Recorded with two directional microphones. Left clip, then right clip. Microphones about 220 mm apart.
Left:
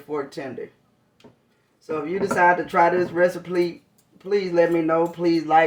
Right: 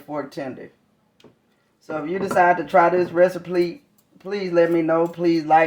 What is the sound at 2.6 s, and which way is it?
Speech, 35° right (ahead or behind).